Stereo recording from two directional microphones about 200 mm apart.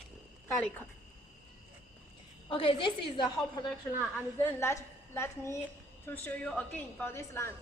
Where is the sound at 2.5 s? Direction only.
25° left (ahead or behind).